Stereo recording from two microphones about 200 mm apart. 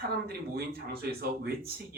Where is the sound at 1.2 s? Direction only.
50° right (ahead or behind).